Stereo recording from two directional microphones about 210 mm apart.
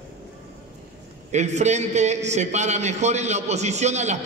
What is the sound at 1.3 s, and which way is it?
A man's voice, 35° right (ahead or behind).